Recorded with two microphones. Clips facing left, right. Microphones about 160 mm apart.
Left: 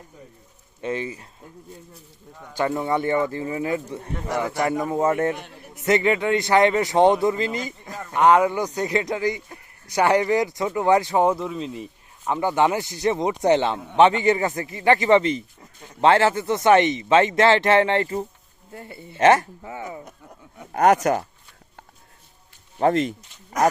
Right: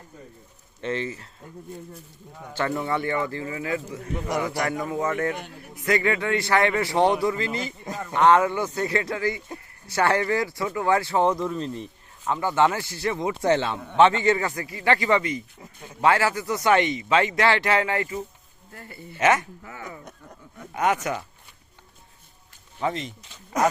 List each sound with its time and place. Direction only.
0.8 s speech: 10° left (ahead or behind)
2.5 s a man's voice: 15° left (ahead or behind)
12.3 s speech: 15° left (ahead or behind)
20.7 s speech: 45° left (ahead or behind)
22.8 s speech: 55° left (ahead or behind)